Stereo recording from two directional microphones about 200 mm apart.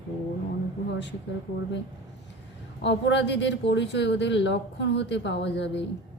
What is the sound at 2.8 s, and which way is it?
A woman's voice, 60° left (ahead or behind).